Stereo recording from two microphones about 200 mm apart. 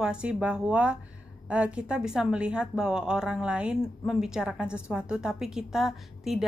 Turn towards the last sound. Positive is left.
turn(degrees=0)  # may be behind; listen again after turning